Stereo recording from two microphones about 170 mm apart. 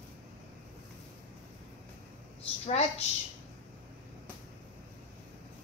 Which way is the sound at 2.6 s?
40° left (ahead or behind).